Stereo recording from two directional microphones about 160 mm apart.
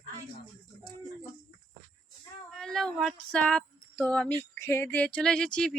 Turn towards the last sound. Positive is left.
turn(degrees=5)  # may be behind; listen again after turning